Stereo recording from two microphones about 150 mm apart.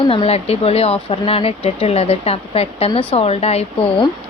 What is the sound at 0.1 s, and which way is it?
Speech, 40° left (ahead or behind).